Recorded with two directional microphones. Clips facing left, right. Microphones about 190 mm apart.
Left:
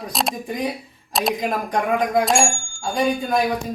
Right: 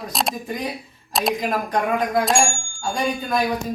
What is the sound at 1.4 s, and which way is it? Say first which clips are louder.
Speech: even; 15° left (ahead or behind).